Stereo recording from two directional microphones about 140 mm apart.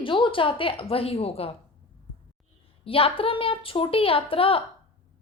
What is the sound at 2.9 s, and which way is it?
A woman's voice, 40° left (ahead or behind).